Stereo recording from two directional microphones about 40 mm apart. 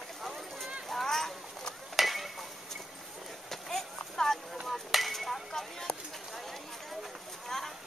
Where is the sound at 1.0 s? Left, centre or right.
Centre.